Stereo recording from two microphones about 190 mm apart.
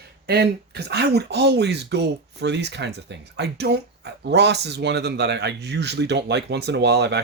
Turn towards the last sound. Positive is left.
turn(degrees=-60)  # may be behind; listen again after turning